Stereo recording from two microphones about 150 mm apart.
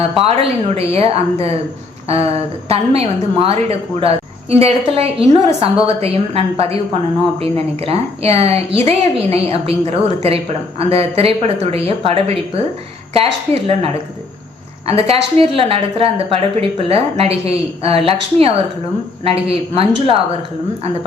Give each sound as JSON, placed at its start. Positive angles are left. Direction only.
{"t": 0.2, "sound": "a woman's voice", "side_deg": -40}